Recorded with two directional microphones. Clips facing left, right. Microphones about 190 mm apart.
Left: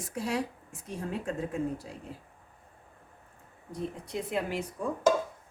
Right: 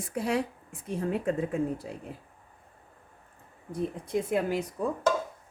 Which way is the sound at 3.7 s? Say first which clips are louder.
Right 5 dB; 45° right (ahead or behind).